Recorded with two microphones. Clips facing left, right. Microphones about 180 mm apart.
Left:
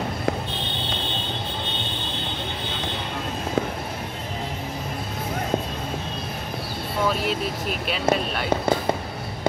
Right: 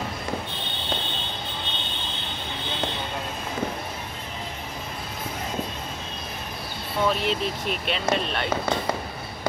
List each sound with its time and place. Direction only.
7.1 s vehicle: 5° left (ahead or behind)
7.8 s speech: 5° left (ahead or behind)
8.5 s speech: 30° left (ahead or behind)